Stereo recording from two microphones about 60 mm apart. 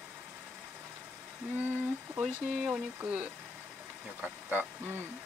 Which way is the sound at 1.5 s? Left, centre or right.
Right.